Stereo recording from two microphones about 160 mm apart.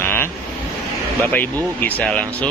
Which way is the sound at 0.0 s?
15° left (ahead or behind).